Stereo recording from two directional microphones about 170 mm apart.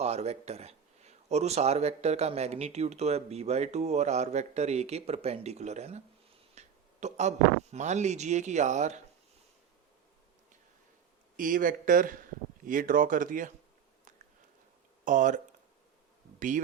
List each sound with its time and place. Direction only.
0.0 s speech: 40° right (ahead or behind)
11.3 s speech: 55° right (ahead or behind)
15.0 s speech: 50° right (ahead or behind)